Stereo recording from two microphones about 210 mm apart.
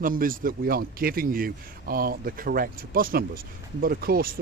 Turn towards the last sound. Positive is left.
turn(degrees=-45)  # may be behind; listen again after turning